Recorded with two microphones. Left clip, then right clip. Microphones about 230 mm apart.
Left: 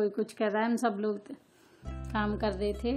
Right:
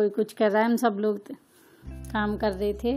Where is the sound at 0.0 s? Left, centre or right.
Centre.